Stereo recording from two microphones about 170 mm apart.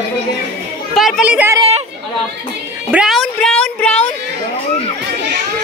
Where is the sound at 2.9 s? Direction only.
5° right (ahead or behind).